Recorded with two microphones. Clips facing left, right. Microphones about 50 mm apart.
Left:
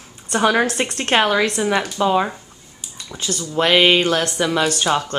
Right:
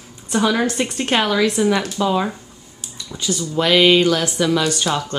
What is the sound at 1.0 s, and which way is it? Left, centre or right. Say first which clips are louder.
Speech: left 3 dB; left.